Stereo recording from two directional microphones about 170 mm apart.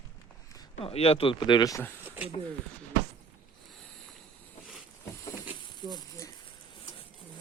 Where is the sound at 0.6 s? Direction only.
35° left (ahead or behind); by 1.9 s 15° left (ahead or behind).